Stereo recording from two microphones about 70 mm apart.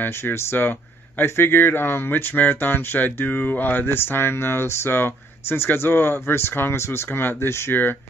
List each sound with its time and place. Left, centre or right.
0.0 s speech: left